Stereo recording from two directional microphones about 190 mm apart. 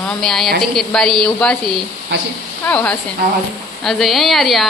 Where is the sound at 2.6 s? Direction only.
5° left (ahead or behind).